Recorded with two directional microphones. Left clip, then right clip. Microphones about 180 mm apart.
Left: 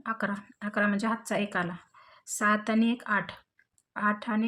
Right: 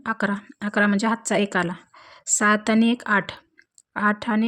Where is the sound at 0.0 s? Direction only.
50° right (ahead or behind).